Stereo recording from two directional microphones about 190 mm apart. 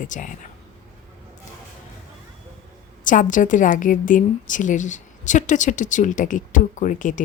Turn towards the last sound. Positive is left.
turn(degrees=40)  # may be behind; listen again after turning